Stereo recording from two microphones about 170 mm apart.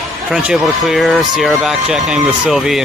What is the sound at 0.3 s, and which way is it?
Speech, 5° right (ahead or behind).